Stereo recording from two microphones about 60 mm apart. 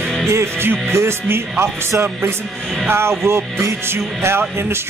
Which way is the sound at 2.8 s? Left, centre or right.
Right.